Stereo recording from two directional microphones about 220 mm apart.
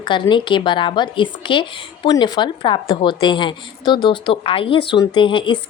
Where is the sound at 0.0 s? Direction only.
20° left (ahead or behind).